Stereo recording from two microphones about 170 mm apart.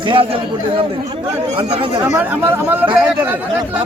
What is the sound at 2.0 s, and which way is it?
Speech, 15° right (ahead or behind).